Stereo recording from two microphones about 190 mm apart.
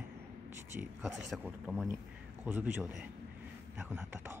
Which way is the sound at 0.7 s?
10° right (ahead or behind).